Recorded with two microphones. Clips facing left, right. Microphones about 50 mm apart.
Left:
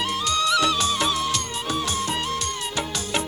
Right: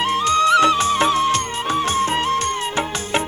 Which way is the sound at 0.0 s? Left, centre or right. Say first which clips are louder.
Right 7 dB; right.